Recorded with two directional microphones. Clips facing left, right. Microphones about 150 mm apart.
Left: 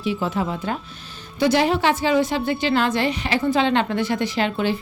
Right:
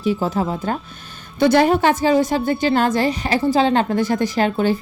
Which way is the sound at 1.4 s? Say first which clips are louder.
Right 4 dB; 50° right (ahead or behind).